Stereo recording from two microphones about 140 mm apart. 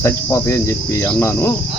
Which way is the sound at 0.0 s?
20° left (ahead or behind).